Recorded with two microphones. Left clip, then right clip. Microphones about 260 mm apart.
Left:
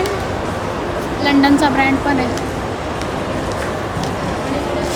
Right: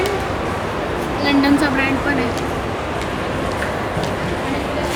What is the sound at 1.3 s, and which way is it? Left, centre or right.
Vehicle, left.